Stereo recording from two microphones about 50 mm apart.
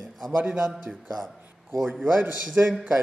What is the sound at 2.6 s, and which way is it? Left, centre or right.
Speech, right.